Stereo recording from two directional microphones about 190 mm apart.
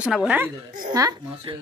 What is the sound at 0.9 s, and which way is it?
Speech, 20° right (ahead or behind).